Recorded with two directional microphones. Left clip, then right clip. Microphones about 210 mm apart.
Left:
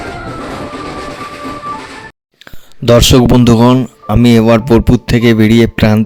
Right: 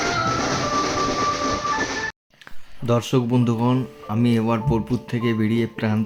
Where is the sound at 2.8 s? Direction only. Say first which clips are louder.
Left 15 dB; 55° left (ahead or behind).